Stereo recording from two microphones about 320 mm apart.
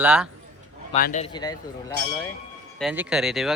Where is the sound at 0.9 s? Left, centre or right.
Left.